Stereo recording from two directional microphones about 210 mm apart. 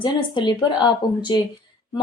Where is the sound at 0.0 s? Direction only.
20° left (ahead or behind).